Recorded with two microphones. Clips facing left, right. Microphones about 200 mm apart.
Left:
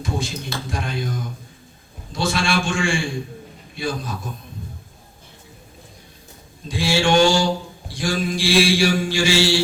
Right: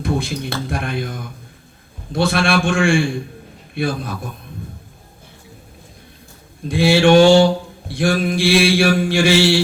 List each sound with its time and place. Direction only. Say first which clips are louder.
0.0 s mantra: right 5 dB; 60° right (ahead or behind)
6.7 s mantra: right 7 dB; 60° right (ahead or behind)